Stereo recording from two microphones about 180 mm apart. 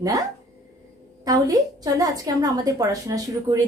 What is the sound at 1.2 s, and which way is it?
A woman's voice, 20° right (ahead or behind).